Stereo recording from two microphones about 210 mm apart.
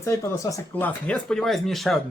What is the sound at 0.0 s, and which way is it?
Speech, 15° left (ahead or behind).